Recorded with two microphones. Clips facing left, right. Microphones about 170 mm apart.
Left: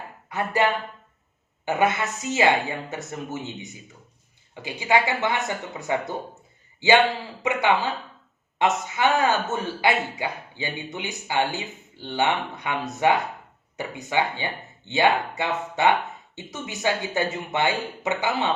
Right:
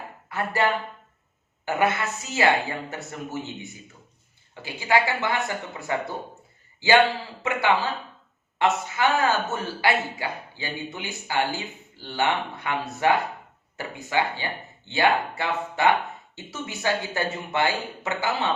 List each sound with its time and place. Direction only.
0.3 s speech: 20° left (ahead or behind)
1.6 s speech: 20° left (ahead or behind)
7.4 s speech: 20° left (ahead or behind)